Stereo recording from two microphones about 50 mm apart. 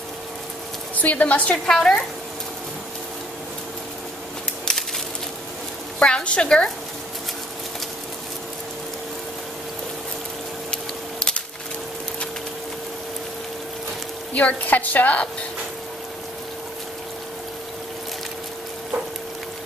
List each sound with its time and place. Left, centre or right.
1.0 s a woman's voice: left
1.5 s a woman's voice: centre
5.9 s a woman's voice: left
10.7 s a sound: centre
14.3 s a woman's voice: left